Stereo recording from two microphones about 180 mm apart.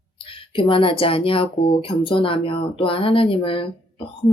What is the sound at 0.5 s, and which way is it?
Speech, 30° left (ahead or behind).